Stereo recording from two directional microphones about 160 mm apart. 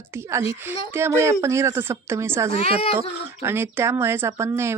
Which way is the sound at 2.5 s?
40° left (ahead or behind).